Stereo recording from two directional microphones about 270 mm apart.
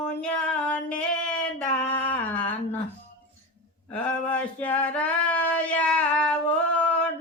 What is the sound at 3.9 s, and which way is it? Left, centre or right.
Male singing, centre.